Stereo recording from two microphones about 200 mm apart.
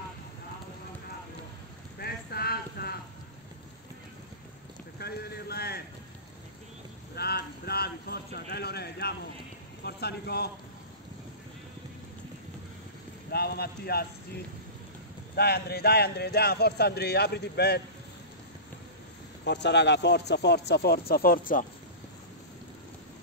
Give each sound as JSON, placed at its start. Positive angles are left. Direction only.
{"t": 2.0, "sound": "a sound", "side_deg": 50}
{"t": 4.9, "sound": "speech", "side_deg": 50}
{"t": 7.2, "sound": "speech", "side_deg": 55}
{"t": 13.3, "sound": "speech", "side_deg": 50}
{"t": 15.3, "sound": "speech", "side_deg": 50}
{"t": 19.4, "sound": "speech", "side_deg": 60}